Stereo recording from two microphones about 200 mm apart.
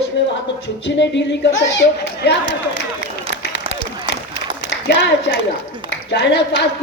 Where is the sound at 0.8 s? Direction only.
60° left (ahead or behind).